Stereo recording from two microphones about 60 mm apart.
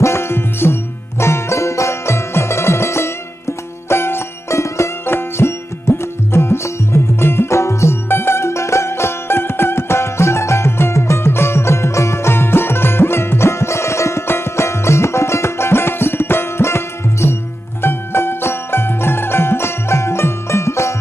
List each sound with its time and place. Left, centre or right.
0.0 s music: left
1.2 s music: left